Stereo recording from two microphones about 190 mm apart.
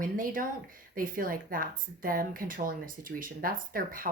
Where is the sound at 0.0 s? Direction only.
45° right (ahead or behind).